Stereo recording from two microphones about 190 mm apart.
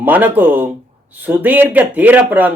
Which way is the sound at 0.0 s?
10° right (ahead or behind).